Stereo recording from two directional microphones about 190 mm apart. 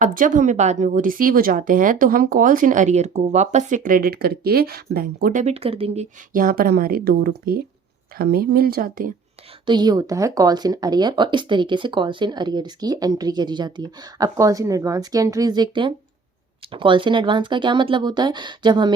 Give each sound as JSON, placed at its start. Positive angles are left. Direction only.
{"t": 0.0, "sound": "speech", "side_deg": -45}
{"t": 6.3, "sound": "speech", "side_deg": -50}
{"t": 9.6, "sound": "speech", "side_deg": -20}